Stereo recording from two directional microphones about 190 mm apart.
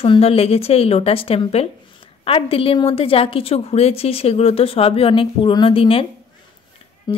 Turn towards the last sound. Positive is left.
turn(degrees=20)  # may be behind; listen again after turning